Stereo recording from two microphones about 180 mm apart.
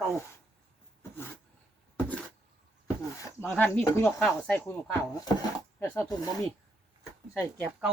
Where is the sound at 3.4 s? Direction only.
10° left (ahead or behind).